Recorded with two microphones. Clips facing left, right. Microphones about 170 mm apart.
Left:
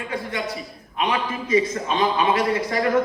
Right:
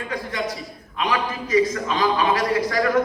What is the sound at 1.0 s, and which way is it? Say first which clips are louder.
A man's voice: even; 25° left (ahead or behind).